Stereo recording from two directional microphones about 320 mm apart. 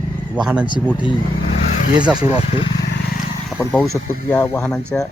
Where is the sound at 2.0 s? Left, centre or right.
Centre.